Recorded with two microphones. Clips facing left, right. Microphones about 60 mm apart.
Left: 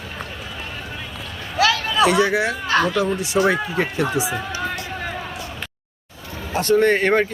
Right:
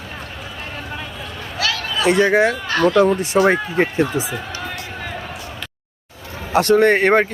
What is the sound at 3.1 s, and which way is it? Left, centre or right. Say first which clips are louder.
Speech: right 3 dB; right.